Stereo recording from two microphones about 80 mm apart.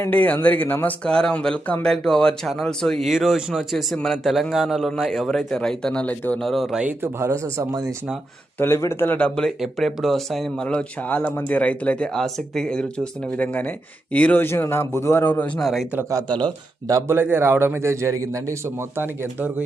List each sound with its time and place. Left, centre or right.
0.1 s a man's voice: centre
1.0 s speech: centre
3.1 s a man's voice: centre
3.9 s a man's voice: centre
6.4 s a man's voice: centre
6.8 s speech: right
7.3 s a man's voice: right
8.5 s speech: left
9.1 s speech: centre
9.6 s a man's voice: centre
10.7 s a man's voice: centre
15.5 s a man's voice: centre
16.9 s a man's voice: right